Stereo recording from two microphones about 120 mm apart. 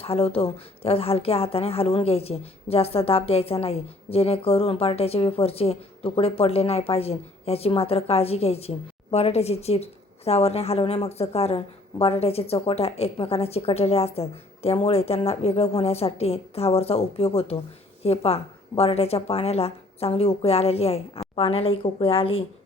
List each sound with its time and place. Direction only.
0.0 s a woman's voice: 55° left (ahead or behind)